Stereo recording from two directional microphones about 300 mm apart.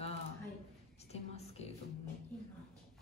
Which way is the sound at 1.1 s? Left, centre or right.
Left.